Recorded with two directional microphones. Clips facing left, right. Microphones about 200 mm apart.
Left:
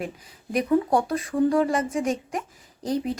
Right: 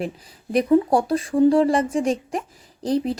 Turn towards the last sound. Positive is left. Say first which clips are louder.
# right 4 dB
turn(degrees=-30)  # may be behind; listen again after turning